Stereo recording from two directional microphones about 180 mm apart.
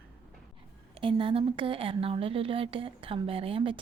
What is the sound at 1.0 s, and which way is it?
A woman's voice, 30° right (ahead or behind).